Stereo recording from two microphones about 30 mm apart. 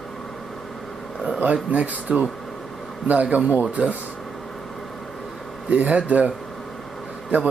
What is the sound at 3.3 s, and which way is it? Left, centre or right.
Speech, right.